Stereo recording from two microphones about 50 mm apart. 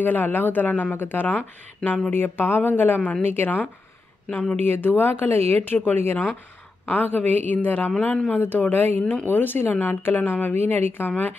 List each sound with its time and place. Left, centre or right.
0.0 s a woman's voice: left
4.3 s speech: left
4.7 s a woman's voice: left
9.3 s a woman's voice: left